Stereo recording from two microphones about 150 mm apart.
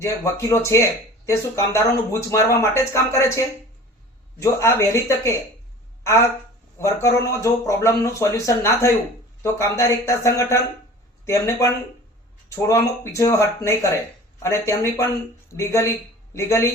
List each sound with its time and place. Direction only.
0.0 s speech: 20° left (ahead or behind)